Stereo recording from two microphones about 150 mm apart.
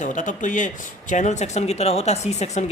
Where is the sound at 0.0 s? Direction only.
55° left (ahead or behind).